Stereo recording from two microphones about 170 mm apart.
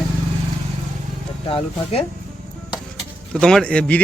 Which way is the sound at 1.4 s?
35° left (ahead or behind).